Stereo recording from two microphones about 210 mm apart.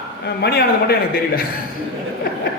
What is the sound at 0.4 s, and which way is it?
A man's voice, 50° left (ahead or behind).